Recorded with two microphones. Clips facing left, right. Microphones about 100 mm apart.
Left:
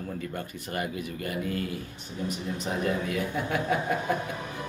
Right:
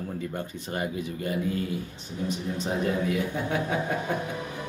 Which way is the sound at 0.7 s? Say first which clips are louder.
Right 2 dB; 25° right (ahead or behind).